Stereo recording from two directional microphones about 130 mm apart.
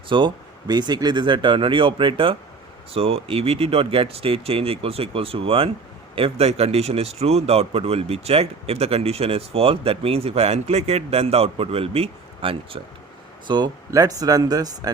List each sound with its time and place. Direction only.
0.1 s speech: 35° right (ahead or behind)
13.5 s speech: 30° right (ahead or behind)